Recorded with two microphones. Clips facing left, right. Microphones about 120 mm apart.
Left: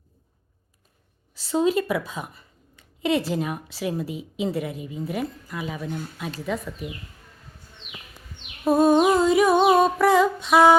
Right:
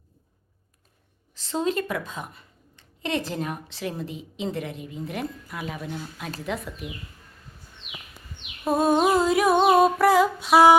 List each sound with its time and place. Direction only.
1.3 s speech: 5° left (ahead or behind)
6.4 s humming: centre (ahead or behind)
8.6 s humming: centre (ahead or behind)